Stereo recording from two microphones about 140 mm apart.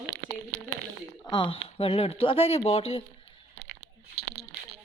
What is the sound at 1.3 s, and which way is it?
Speech, 35° left (ahead or behind).